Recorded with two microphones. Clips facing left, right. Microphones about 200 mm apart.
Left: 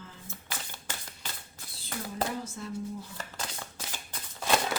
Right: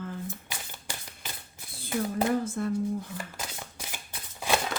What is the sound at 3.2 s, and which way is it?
Shuffling cards, 10° right (ahead or behind).